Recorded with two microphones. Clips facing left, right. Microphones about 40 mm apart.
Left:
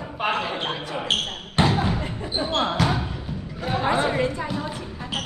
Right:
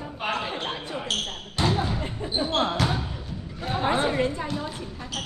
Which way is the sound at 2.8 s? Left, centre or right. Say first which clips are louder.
Left 3 dB; centre.